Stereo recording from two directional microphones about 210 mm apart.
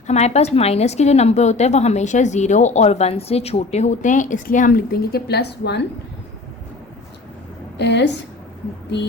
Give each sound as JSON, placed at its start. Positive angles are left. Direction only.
{"t": 0.1, "sound": "a woman's voice", "side_deg": 30}
{"t": 7.8, "sound": "a woman's voice", "side_deg": 55}